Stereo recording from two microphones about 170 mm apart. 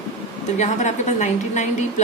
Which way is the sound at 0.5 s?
45° left (ahead or behind).